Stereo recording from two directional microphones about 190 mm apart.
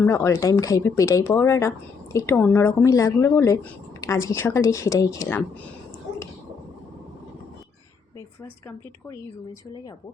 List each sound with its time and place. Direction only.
0.0 s speech: 15° left (ahead or behind)